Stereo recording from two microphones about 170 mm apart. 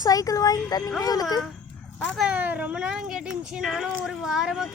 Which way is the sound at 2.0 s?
5° right (ahead or behind).